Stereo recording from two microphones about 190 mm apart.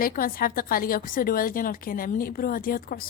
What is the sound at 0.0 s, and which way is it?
A woman's voice, 50° left (ahead or behind).